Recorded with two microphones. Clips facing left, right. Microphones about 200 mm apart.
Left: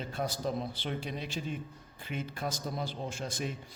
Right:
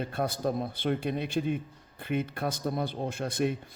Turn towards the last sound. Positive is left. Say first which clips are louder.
# right 8 dB
turn(degrees=-60)  # may be behind; listen again after turning